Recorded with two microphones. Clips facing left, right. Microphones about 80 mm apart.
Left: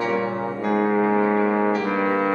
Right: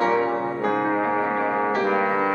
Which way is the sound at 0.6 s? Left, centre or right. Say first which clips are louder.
Left 3 dB; right.